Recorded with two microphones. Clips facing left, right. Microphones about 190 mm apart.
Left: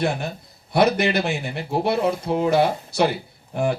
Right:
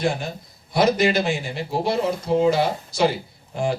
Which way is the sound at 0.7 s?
60° left (ahead or behind).